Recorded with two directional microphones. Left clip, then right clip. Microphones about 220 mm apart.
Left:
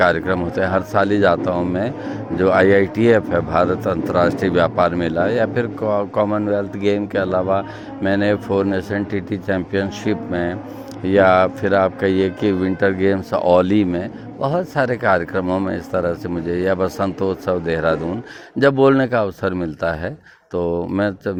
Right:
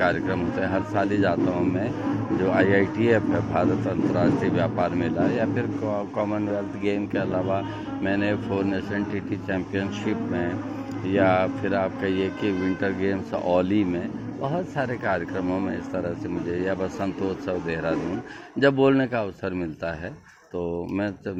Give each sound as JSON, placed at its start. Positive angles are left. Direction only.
{"t": 0.0, "sound": "speech", "side_deg": 50}